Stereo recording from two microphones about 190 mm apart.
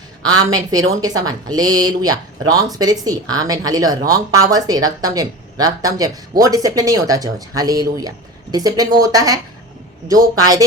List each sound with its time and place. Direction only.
0.7 s speech: 20° right (ahead or behind)